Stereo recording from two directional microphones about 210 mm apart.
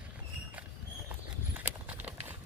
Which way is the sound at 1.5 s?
10° right (ahead or behind).